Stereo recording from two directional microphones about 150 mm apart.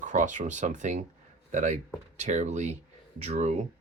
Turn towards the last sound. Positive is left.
turn(degrees=-45)  # may be behind; listen again after turning